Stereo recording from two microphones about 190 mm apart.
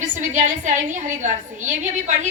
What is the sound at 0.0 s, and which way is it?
A woman's voice, 40° right (ahead or behind).